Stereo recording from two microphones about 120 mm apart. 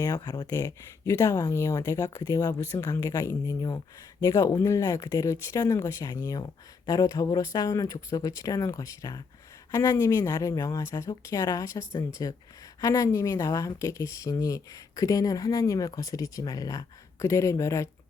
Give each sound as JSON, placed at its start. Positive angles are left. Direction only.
{"t": 0.0, "sound": "speech", "side_deg": 35}